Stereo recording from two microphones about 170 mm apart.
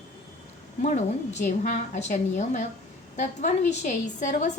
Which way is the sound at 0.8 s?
45° left (ahead or behind).